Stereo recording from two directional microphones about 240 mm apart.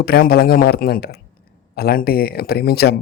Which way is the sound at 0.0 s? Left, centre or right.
Left.